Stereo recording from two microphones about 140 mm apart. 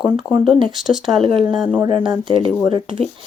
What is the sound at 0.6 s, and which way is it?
Speech, 5° right (ahead or behind).